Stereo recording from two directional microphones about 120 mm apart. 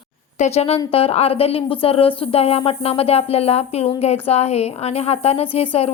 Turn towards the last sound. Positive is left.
turn(degrees=55)  # may be behind; listen again after turning